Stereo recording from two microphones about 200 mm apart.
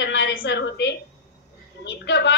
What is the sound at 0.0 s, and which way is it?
Speech, 65° left (ahead or behind).